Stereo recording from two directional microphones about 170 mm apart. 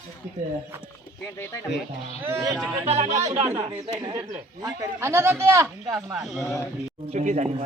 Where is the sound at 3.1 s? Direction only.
20° right (ahead or behind).